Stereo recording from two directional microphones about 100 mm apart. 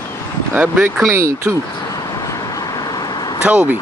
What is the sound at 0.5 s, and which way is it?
Speech, 15° right (ahead or behind).